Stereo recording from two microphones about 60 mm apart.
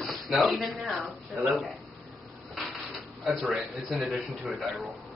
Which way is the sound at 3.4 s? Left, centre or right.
Centre.